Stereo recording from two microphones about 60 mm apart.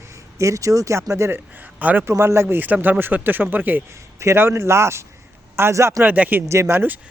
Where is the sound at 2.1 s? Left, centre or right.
Right.